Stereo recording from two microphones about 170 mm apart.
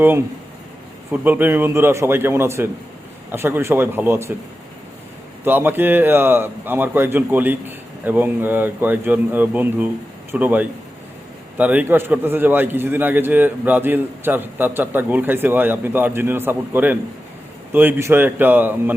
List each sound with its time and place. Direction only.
1.1 s a man's voice: 10° right (ahead or behind)
5.5 s a man's voice: 10° right (ahead or behind)